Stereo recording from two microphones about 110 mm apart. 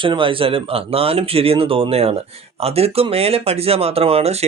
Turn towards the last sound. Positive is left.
turn(degrees=-70)  # may be behind; listen again after turning